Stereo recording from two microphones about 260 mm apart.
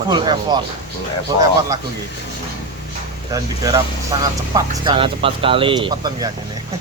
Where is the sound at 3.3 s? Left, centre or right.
Centre.